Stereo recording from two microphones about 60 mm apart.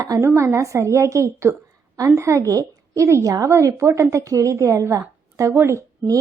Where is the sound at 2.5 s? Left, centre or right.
Right.